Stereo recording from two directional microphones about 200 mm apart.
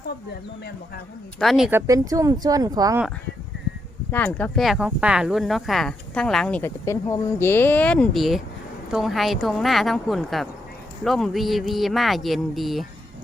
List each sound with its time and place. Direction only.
1.4 s speech: centre (ahead or behind)
1.9 s speech: 15° right (ahead or behind)
4.1 s speech: 10° left (ahead or behind)